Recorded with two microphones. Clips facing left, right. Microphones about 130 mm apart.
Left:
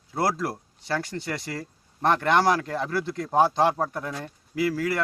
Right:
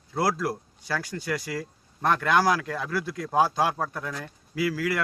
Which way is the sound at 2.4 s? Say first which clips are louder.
Left 2 dB; 25° left (ahead or behind).